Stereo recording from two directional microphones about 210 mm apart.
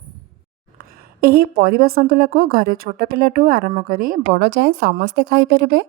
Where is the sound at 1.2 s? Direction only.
45° right (ahead or behind).